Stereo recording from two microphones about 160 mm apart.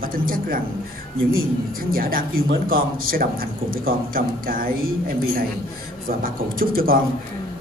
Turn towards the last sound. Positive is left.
turn(degrees=-65)  # may be behind; listen again after turning